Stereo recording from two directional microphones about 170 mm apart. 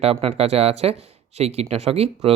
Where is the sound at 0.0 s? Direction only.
35° right (ahead or behind).